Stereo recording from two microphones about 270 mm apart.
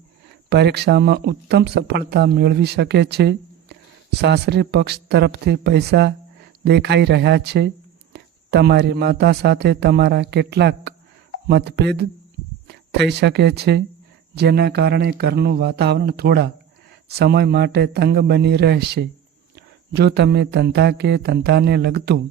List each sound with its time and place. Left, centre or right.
0.5 s speech: right